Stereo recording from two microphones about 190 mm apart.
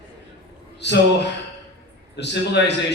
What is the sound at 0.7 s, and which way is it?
Speech, 65° left (ahead or behind).